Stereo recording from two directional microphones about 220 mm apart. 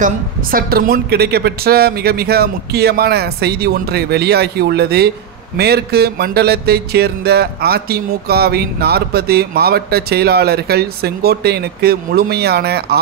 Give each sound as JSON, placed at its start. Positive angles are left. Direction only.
{"t": 0.0, "sound": "music", "side_deg": -40}